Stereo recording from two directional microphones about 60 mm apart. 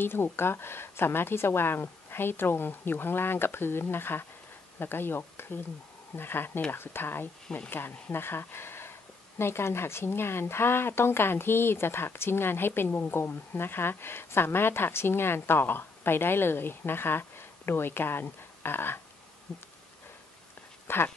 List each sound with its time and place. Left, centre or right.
0.0 s speech: left
20.8 s speech: left